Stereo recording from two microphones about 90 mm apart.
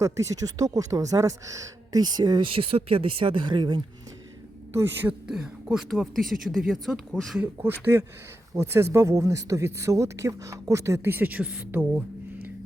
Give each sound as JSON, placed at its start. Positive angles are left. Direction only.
{"t": 0.0, "sound": "speech", "side_deg": -35}
{"t": 1.9, "sound": "speech", "side_deg": -50}
{"t": 2.5, "sound": "speech", "side_deg": -90}
{"t": 4.7, "sound": "a man's voice", "side_deg": -25}
{"t": 5.6, "sound": "speech", "side_deg": -5}
{"t": 8.5, "sound": "speech", "side_deg": -30}
{"t": 11.7, "sound": "a sound", "side_deg": -15}